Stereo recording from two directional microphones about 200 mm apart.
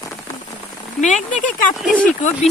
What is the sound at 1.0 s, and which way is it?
Speech, 35° left (ahead or behind).